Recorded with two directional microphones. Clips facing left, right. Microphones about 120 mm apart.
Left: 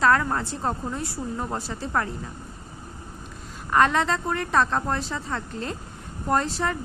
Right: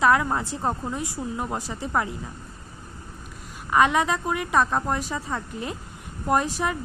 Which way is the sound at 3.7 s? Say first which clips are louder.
Even; 10° right (ahead or behind).